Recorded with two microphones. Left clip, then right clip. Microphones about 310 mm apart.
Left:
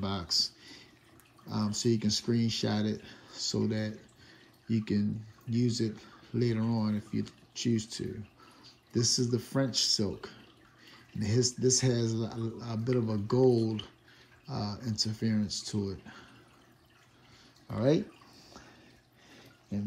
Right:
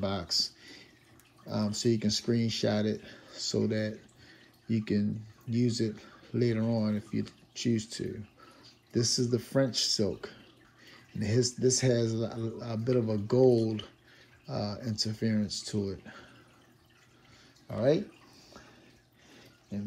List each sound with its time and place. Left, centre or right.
0.0 s a sound: centre
1.4 s speech: centre
17.6 s speech: centre